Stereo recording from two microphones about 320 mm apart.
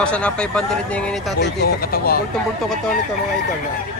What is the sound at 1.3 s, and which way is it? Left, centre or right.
Speech, left.